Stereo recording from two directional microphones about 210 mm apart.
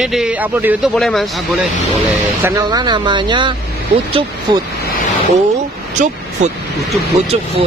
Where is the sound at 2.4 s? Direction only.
15° right (ahead or behind).